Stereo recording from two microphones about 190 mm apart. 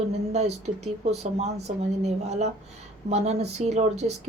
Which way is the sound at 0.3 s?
35° right (ahead or behind).